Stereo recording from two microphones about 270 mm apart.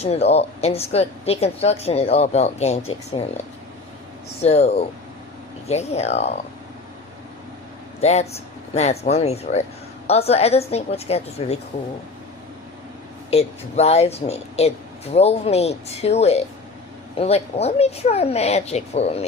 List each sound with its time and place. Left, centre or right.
0.0 s a woman's voice: left
4.4 s a woman's voice: left
8.0 s a woman's voice: left
13.3 s a woman's voice: left